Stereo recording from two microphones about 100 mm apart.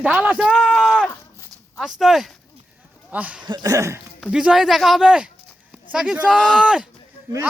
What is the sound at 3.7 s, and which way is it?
Speech, 30° right (ahead or behind).